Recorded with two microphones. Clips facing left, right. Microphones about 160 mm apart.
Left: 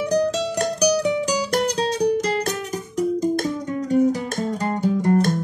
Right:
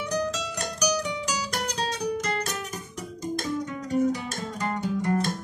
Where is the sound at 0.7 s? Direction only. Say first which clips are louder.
Left 7 dB; 35° left (ahead or behind).